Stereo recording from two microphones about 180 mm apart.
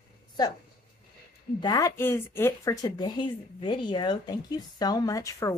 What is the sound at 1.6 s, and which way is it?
Speech, 20° left (ahead or behind).